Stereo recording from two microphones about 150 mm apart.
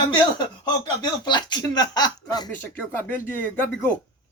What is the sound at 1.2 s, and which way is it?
A man's voice, 30° left (ahead or behind).